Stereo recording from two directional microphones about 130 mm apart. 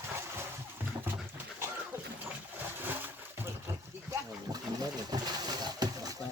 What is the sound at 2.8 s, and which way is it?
Pigeon, 15° right (ahead or behind).